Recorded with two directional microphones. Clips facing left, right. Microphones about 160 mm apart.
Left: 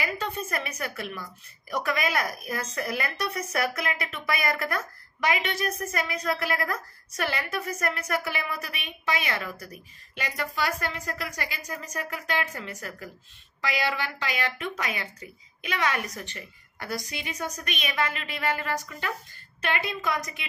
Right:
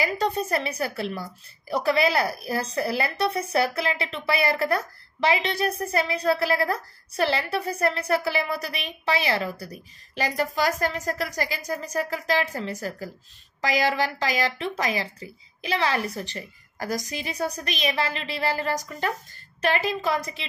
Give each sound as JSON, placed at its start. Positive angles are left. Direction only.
{"t": 0.0, "sound": "a woman's voice", "side_deg": -35}